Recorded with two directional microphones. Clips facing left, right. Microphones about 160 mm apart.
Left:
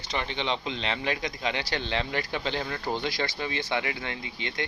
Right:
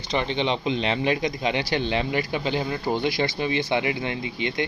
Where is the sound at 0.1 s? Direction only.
20° right (ahead or behind).